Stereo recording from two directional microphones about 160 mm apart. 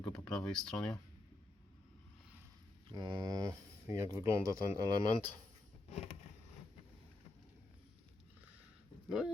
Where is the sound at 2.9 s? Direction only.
25° right (ahead or behind).